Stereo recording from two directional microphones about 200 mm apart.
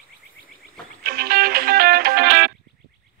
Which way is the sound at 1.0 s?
50° right (ahead or behind).